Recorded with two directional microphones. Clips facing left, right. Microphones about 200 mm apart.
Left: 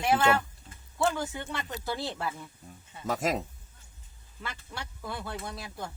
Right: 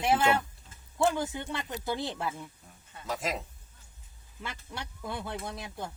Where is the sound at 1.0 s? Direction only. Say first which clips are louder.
Right 1 dB; 15° right (ahead or behind).